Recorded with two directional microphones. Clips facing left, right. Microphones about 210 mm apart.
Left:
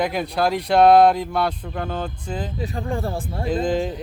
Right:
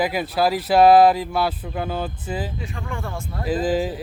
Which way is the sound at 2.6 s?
35° left (ahead or behind).